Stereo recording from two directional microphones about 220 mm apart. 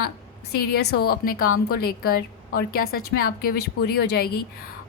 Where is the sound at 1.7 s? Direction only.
45° left (ahead or behind).